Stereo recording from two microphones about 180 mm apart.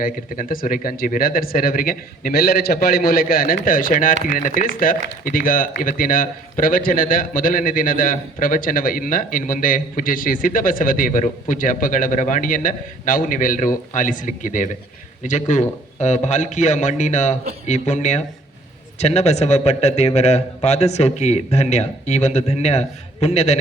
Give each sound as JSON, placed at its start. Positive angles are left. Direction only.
{"t": 0.0, "sound": "a man's voice", "side_deg": 50}